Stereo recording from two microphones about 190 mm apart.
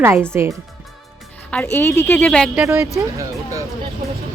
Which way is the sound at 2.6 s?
15° right (ahead or behind).